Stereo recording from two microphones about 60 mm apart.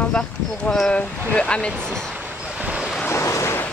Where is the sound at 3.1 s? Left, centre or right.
Left.